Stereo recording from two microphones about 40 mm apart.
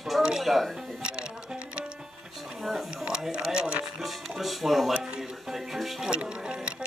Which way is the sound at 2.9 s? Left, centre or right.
Right.